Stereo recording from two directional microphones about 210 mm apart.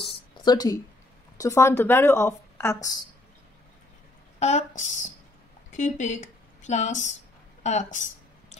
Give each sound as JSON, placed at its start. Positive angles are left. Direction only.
{"t": 0.0, "sound": "a sound", "side_deg": 20}
{"t": 1.4, "sound": "speech", "side_deg": 15}
{"t": 4.4, "sound": "a woman's voice", "side_deg": 30}